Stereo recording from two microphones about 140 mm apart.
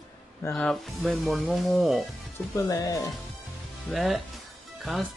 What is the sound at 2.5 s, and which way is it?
Speech, 25° left (ahead or behind).